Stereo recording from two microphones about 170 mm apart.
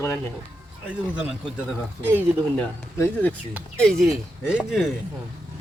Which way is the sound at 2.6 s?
10° left (ahead or behind).